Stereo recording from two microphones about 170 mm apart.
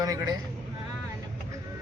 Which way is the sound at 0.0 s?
20° right (ahead or behind).